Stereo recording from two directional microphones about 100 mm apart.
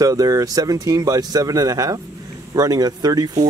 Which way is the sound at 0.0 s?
35° right (ahead or behind).